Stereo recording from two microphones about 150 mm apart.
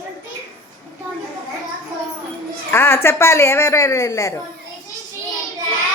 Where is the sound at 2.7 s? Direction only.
15° left (ahead or behind).